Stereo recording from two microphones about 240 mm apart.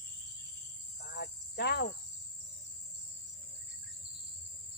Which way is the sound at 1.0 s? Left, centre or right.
Left.